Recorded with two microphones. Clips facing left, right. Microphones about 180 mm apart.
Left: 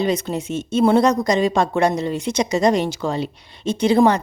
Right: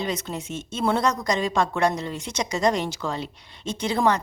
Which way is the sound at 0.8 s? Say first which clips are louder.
Left 7 dB; 20° left (ahead or behind).